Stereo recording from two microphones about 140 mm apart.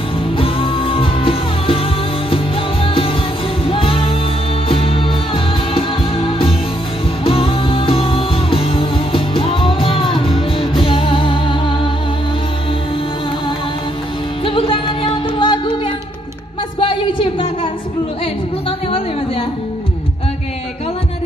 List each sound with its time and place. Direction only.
0.4 s music: 40° left (ahead or behind)
14.4 s music: 40° left (ahead or behind)
16.8 s a sound: 35° left (ahead or behind)